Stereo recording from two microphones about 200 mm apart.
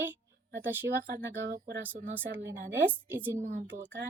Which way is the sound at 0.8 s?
45° right (ahead or behind).